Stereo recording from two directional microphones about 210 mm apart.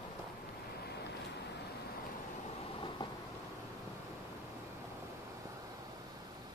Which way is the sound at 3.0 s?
20° left (ahead or behind).